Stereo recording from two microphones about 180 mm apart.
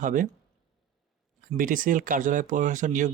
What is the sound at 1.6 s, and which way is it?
Speech, 50° right (ahead or behind).